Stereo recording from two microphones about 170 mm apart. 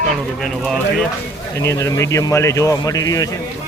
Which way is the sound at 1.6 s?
15° left (ahead or behind).